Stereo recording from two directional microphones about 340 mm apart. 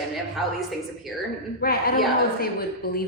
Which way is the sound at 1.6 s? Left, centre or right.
Left.